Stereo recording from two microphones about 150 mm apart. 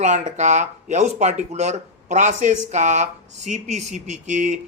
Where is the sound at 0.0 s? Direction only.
55° right (ahead or behind).